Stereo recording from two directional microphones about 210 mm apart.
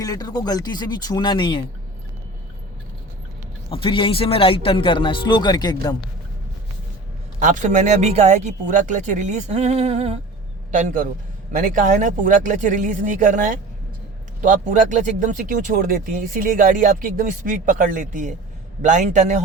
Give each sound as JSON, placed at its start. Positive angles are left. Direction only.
{"t": 0.0, "sound": "speech", "side_deg": 20}
{"t": 3.7, "sound": "speech", "side_deg": 25}
{"t": 7.3, "sound": "speech", "side_deg": -35}